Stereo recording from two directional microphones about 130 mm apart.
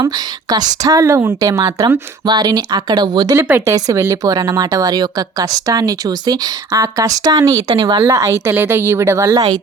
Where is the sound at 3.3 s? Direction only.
20° right (ahead or behind).